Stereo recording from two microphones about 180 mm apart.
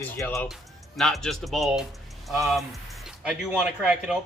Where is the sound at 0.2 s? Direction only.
15° left (ahead or behind).